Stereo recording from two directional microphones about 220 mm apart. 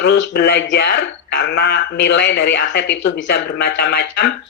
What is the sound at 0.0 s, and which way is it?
A man's voice, 50° left (ahead or behind).